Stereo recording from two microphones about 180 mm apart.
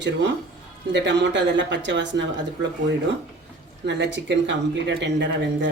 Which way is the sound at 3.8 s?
80° right.